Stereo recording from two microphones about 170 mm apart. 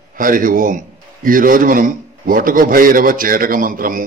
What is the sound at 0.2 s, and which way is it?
A man's voice, 55° right (ahead or behind).